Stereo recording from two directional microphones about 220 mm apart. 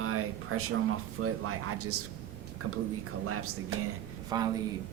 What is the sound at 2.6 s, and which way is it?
Speech, 70° right (ahead or behind).